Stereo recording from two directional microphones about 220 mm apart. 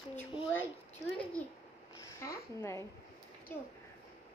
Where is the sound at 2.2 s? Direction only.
15° left (ahead or behind).